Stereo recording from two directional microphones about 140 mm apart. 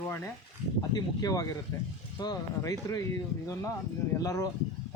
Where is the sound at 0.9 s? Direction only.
25° left (ahead or behind).